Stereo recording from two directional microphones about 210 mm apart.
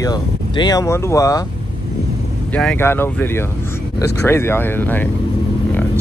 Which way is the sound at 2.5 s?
5° left (ahead or behind).